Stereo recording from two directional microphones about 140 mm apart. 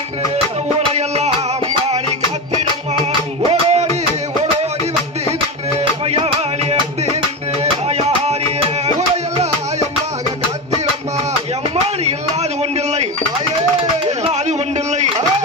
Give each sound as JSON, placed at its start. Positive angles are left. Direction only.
{"t": 0.9, "sound": "music", "side_deg": -50}
{"t": 5.8, "sound": "music", "side_deg": -40}
{"t": 12.0, "sound": "a sound", "side_deg": -50}